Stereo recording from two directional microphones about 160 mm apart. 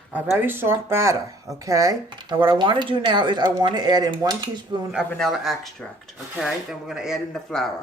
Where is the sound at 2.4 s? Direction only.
30° right (ahead or behind).